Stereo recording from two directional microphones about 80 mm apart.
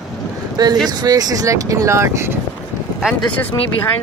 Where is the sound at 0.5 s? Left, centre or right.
Right.